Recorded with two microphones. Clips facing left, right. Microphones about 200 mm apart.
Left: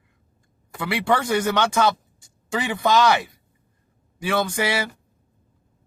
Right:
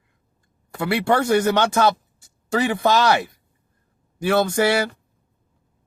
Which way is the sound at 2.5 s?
40° right (ahead or behind).